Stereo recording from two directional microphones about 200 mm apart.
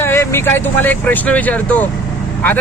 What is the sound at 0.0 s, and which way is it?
Speech, 10° left (ahead or behind).